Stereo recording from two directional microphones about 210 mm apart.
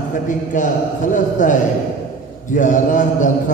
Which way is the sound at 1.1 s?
35° left (ahead or behind).